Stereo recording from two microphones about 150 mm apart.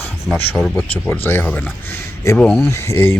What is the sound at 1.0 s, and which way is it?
Speech, 15° left (ahead or behind).